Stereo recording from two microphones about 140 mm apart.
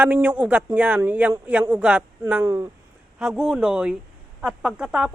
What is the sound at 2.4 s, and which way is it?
Speech, 20° right (ahead or behind).